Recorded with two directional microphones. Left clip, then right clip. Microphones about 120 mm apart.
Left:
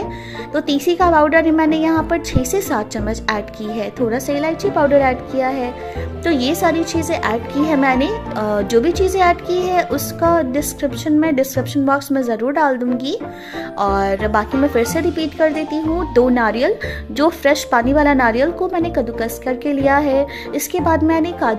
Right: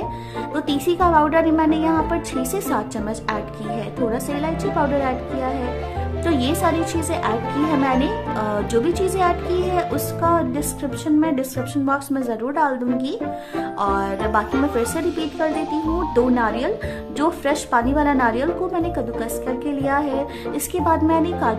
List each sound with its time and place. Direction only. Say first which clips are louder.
0.6 s a child's voice: left 4 dB; 20° left (ahead or behind)